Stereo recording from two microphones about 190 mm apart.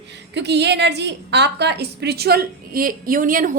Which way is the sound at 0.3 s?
65° right (ahead or behind).